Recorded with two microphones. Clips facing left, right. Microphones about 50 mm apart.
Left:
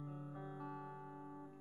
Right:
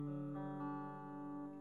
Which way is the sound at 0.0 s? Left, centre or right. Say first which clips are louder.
Right 6 dB; centre.